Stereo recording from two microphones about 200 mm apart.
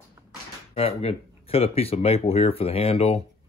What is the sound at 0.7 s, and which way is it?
Speech, 30° left (ahead or behind).